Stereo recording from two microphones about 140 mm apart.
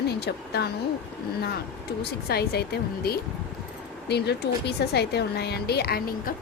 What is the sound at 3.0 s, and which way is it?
Speech, 90° left.